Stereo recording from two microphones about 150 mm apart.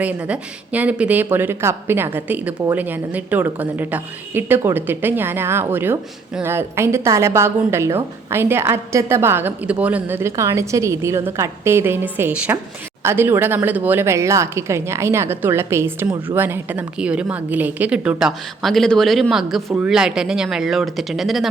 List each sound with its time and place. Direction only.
0.0 s a woman's voice: 10° right (ahead or behind)